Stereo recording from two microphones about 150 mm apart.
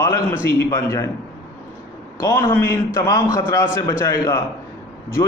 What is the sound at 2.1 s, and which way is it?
A man's voice, 15° left (ahead or behind).